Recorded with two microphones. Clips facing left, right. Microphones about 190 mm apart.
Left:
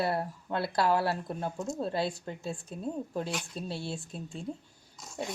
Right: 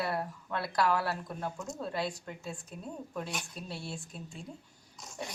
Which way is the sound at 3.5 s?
30° left (ahead or behind).